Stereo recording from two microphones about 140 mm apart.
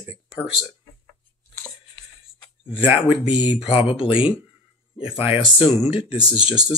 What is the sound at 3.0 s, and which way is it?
Speech, 40° left (ahead or behind).